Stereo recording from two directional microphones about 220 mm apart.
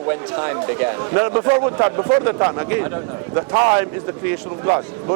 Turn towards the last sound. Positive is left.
turn(degrees=-25)  # may be behind; listen again after turning